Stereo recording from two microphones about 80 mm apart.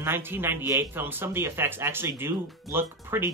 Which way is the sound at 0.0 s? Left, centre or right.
Right.